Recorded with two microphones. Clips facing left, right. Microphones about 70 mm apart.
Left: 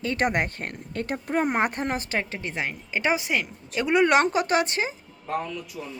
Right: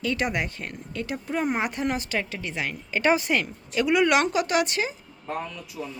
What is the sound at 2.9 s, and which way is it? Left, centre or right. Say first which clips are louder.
Speech: right 3 dB; centre.